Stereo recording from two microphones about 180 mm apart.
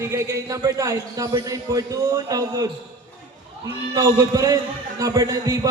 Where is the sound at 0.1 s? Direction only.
15° right (ahead or behind).